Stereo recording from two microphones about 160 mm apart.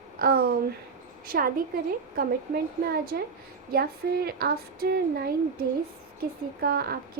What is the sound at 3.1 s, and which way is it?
Speech, 80° right.